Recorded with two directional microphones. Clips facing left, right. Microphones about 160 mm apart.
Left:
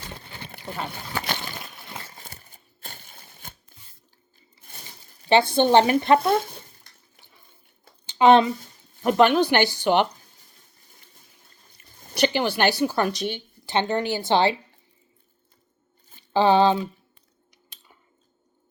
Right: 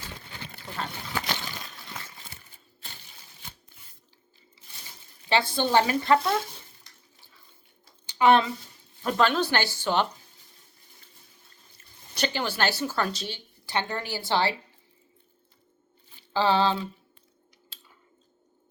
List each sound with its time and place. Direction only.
0.7 s speech: 20° left (ahead or behind)
2.1 s a sound: 45° left (ahead or behind)
4.6 s a sound: 55° left (ahead or behind)
5.3 s speech: 20° left (ahead or behind)
8.0 s a sound: 20° left (ahead or behind)
9.0 s speech: 15° left (ahead or behind)
12.1 s speech: 15° left (ahead or behind)
16.3 s speech: 20° left (ahead or behind)
17.7 s scissors: 20° left (ahead or behind)